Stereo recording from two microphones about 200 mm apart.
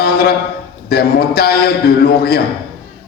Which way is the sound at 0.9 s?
50° left (ahead or behind).